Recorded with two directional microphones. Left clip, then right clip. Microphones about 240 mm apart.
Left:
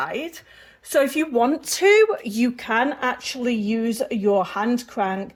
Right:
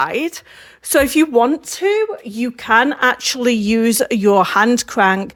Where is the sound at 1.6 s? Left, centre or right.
Centre.